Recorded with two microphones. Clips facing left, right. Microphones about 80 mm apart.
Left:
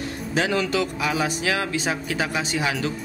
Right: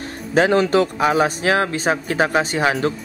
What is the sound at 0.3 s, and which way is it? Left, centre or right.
A man's voice, right.